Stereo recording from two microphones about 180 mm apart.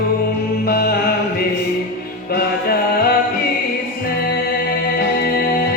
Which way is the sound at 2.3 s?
55° left (ahead or behind).